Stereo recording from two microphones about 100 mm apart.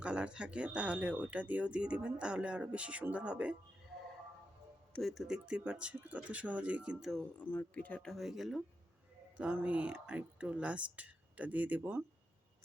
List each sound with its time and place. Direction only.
0.0 s speech: 10° right (ahead or behind)
4.9 s speech: centre (ahead or behind)
7.3 s speech: 15° left (ahead or behind)
8.1 s speech: centre (ahead or behind)
9.4 s speech: 15° right (ahead or behind)